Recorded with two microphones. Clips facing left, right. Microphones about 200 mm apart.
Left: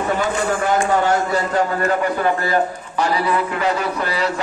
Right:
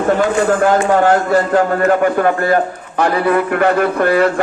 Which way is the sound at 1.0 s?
55° right (ahead or behind).